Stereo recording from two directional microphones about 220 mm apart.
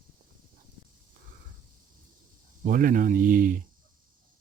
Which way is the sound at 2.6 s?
40° right (ahead or behind).